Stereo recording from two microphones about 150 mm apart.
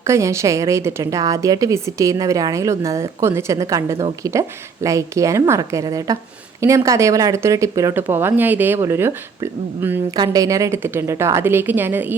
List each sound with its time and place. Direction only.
0.0 s a woman's voice: 20° right (ahead or behind)